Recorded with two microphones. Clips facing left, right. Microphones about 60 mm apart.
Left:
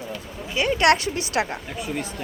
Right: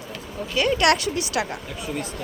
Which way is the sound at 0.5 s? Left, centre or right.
Left.